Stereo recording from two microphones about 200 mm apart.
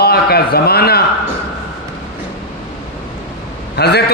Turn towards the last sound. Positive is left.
turn(degrees=55)  # may be behind; listen again after turning